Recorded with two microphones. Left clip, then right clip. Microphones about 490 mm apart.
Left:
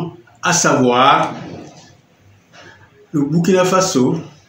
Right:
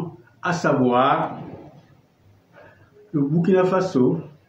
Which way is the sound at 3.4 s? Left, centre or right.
Right.